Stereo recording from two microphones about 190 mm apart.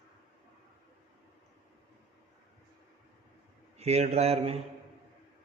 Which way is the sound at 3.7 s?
35° right (ahead or behind).